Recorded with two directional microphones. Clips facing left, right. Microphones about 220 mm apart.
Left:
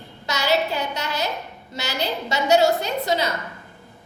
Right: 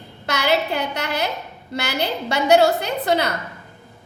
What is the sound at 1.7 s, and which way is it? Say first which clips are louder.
A woman's voice: right 3 dB; 60° right (ahead or behind).